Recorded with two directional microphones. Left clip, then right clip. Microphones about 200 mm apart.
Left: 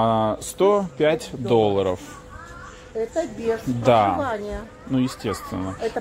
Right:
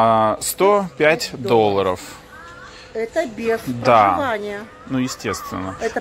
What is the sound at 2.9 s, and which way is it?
Speech, 40° right (ahead or behind).